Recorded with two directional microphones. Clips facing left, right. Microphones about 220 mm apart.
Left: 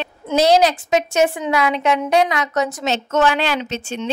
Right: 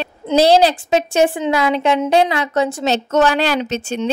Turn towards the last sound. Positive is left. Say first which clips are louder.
# right 4 dB
turn(degrees=-40)  # may be behind; listen again after turning